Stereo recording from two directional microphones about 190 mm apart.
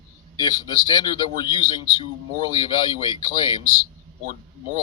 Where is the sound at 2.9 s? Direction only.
25° left (ahead or behind).